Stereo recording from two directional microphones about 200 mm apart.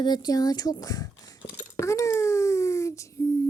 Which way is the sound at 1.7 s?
15° left (ahead or behind).